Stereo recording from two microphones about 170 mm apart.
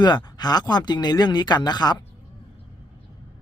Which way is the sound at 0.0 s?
25° left (ahead or behind).